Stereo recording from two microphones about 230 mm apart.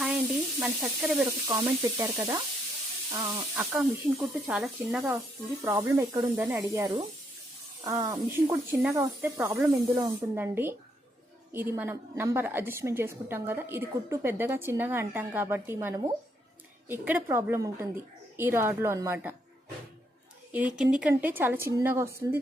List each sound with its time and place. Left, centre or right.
0.6 s speech: centre
1.5 s a woman's voice: centre
3.5 s a woman's voice: centre
20.5 s a woman's voice: centre